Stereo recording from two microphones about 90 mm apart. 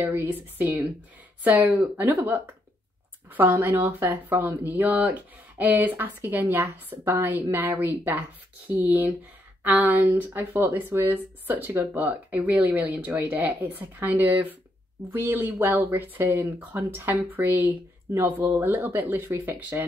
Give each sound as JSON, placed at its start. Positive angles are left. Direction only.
{"t": 0.0, "sound": "speech", "side_deg": -25}